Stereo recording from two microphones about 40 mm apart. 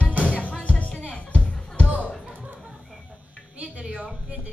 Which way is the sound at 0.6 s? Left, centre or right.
Left.